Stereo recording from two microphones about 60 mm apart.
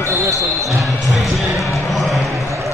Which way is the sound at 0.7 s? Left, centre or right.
Centre.